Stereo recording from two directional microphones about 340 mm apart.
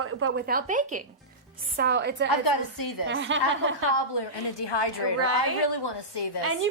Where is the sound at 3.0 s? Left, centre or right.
Right.